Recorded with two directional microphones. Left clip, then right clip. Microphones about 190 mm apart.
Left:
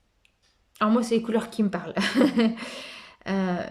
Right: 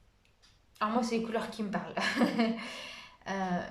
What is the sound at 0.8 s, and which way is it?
Speech, 45° left (ahead or behind).